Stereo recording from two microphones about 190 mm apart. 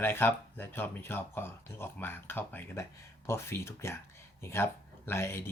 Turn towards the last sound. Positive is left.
turn(degrees=15)  # may be behind; listen again after turning